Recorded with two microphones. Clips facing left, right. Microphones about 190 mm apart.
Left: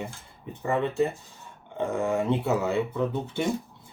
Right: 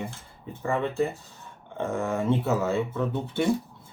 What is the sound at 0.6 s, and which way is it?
Speech, 20° left (ahead or behind).